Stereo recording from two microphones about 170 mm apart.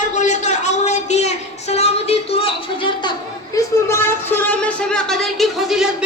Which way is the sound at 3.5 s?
15° left (ahead or behind).